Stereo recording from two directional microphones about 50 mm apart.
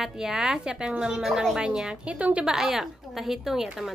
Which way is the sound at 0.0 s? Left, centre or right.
Centre.